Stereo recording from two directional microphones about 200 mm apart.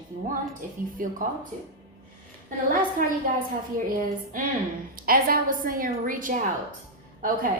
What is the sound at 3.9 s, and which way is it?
A woman's voice, 40° right (ahead or behind).